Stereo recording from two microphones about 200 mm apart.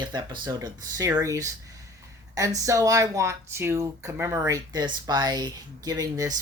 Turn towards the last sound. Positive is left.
turn(degrees=-20)  # may be behind; listen again after turning